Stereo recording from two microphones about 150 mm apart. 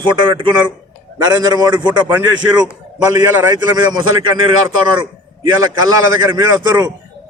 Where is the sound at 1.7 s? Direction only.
10° right (ahead or behind).